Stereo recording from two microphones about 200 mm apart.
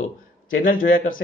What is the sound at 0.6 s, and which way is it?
Speech, 45° left (ahead or behind).